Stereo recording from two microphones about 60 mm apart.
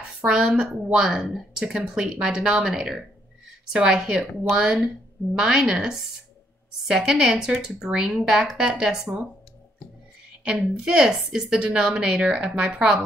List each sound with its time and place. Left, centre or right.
0.2 s a woman's voice: centre
10.4 s a woman's voice: centre